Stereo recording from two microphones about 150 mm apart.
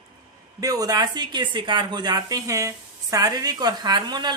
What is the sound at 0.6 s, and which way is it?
Speech, 25° right (ahead or behind).